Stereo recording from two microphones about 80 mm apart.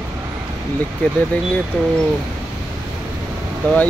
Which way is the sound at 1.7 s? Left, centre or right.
Centre.